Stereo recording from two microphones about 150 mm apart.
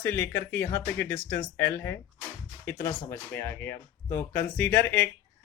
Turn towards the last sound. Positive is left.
turn(degrees=15)  # may be behind; listen again after turning